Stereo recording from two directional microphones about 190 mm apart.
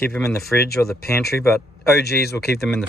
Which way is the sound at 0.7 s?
55° left (ahead or behind).